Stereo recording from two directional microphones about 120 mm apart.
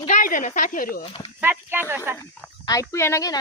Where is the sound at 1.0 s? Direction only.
50° left (ahead or behind).